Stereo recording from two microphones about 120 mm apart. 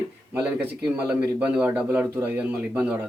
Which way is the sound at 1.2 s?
15° right (ahead or behind).